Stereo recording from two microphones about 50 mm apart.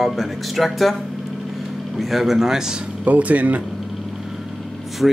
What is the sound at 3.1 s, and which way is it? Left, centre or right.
Speech, right.